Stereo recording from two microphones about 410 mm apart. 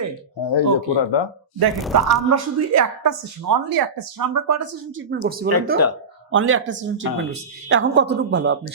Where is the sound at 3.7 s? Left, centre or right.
Right.